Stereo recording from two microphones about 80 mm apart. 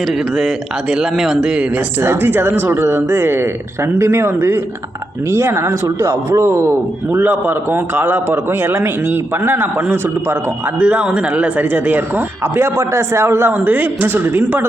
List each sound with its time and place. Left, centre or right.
0.3 s speech: centre
2.0 s a man's voice: right
10.8 s a man's voice: centre